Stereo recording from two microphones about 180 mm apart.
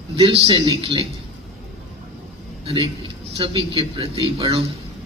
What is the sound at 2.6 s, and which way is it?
A man's voice, 25° right (ahead or behind).